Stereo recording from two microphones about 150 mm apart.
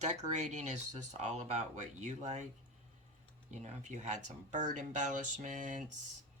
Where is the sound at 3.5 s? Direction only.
50° right (ahead or behind).